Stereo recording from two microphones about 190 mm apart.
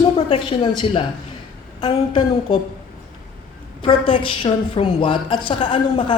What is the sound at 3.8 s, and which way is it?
A man's voice, 25° left (ahead or behind).